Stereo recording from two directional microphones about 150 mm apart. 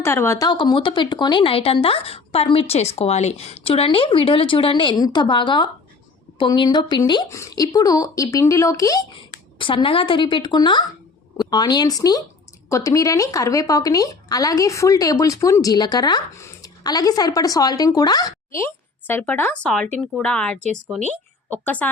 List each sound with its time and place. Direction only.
0.0 s speech: 15° left (ahead or behind)
9.6 s a woman's voice: 35° left (ahead or behind); by 21.8 s 10° left (ahead or behind)